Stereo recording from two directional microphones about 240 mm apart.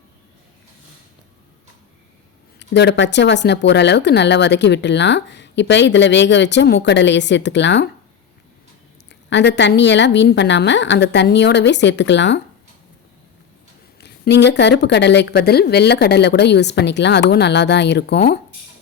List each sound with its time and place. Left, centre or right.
2.6 s speech: left
9.3 s speech: left
14.0 s speech: left